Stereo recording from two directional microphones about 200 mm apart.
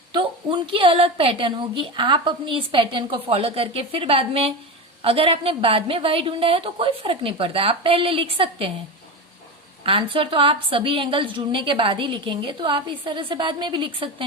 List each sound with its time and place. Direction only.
0.7 s a woman's voice: 25° right (ahead or behind)
9.8 s a woman's voice: 25° right (ahead or behind)